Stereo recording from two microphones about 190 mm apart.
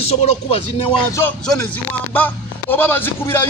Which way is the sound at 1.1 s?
5° left (ahead or behind).